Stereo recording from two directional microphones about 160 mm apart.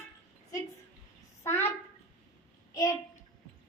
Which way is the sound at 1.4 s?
15° left (ahead or behind).